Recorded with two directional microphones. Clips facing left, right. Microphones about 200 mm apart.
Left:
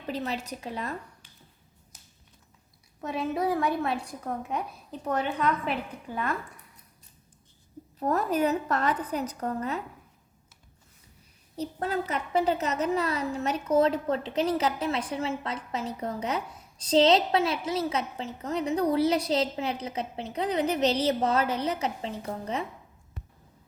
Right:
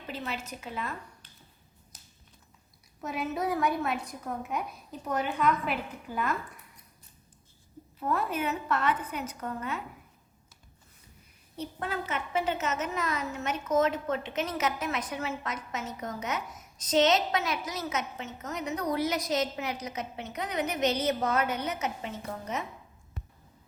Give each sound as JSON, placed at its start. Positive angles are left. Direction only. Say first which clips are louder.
{"t": 0.1, "sound": "a woman's voice", "louder": "left 5 dB", "side_deg": 35}
{"t": 3.0, "sound": "a woman's voice", "louder": "left 3 dB", "side_deg": 30}
{"t": 7.9, "sound": "a woman's voice", "louder": "left 4 dB", "side_deg": 40}
{"t": 11.5, "sound": "a woman's voice", "louder": "left 5 dB", "side_deg": 35}